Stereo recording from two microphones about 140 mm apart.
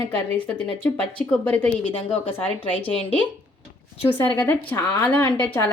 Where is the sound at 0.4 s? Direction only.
10° left (ahead or behind).